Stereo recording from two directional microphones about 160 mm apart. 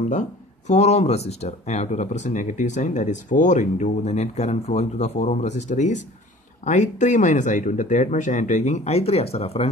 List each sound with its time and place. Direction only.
0.1 s speech: 50° left (ahead or behind)